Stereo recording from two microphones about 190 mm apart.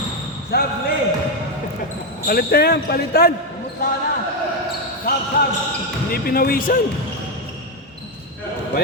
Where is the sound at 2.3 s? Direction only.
55° left (ahead or behind).